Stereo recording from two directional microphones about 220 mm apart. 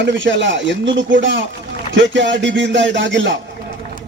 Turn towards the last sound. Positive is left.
turn(degrees=-55)  # may be behind; listen again after turning